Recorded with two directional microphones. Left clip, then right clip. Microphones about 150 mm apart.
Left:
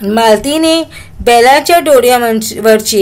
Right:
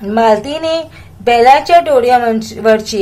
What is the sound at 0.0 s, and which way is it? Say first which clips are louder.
Speech: left 2 dB; 50° left (ahead or behind).